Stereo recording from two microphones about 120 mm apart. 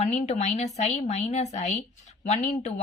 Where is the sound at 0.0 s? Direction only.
70° left (ahead or behind).